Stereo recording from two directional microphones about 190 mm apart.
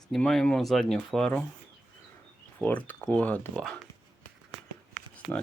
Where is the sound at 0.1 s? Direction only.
Centre (ahead or behind).